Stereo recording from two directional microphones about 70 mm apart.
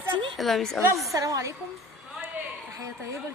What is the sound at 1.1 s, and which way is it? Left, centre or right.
Speech, right.